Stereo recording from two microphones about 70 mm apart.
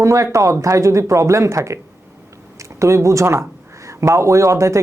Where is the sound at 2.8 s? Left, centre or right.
Right.